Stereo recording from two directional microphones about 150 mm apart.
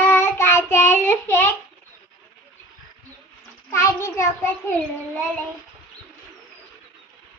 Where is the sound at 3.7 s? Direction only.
20° left (ahead or behind).